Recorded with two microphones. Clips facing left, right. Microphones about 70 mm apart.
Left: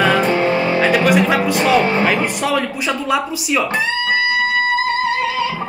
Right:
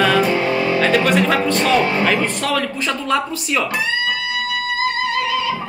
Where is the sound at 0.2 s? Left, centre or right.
Left.